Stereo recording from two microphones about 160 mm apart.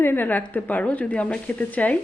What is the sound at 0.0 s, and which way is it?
Speech, 10° left (ahead or behind).